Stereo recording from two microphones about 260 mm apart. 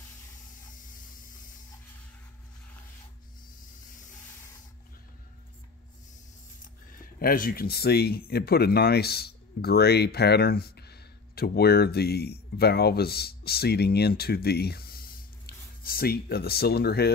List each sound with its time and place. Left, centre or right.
0.7 s spray: left
7.2 s speech: left